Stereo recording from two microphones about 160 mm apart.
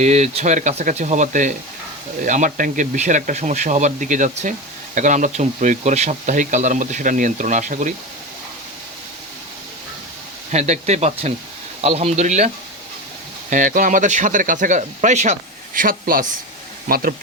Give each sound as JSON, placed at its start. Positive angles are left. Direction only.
{"t": 0.0, "sound": "speech", "side_deg": -45}
{"t": 10.5, "sound": "speech", "side_deg": -45}
{"t": 13.5, "sound": "speech", "side_deg": -55}